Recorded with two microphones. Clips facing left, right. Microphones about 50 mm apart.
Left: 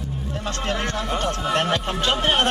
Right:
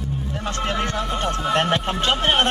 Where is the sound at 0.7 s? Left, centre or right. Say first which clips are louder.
Even; right.